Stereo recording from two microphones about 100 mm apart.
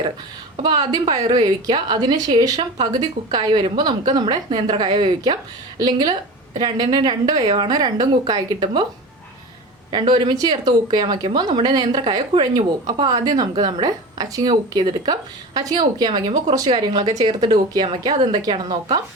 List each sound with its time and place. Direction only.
0.6 s speech: 45° right (ahead or behind)
9.9 s speech: 50° right (ahead or behind)